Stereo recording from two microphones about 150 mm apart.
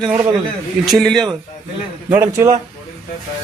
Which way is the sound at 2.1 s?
15° right (ahead or behind).